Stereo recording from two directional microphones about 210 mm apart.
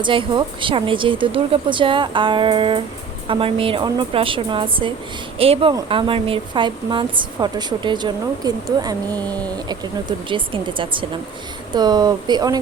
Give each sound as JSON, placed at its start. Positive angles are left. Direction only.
{"t": 0.0, "sound": "a woman's voice", "side_deg": -25}